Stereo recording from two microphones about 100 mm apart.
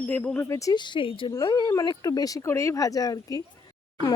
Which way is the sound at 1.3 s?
40° left (ahead or behind).